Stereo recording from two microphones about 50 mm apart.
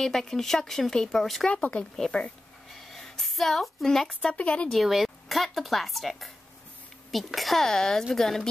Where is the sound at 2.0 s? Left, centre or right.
Centre.